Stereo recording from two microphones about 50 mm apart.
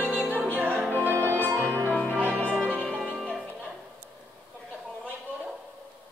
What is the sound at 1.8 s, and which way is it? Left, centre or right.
Music, left.